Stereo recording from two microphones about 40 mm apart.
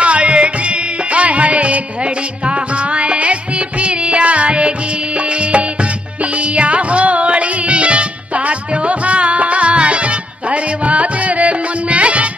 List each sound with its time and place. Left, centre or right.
0.0 s music: right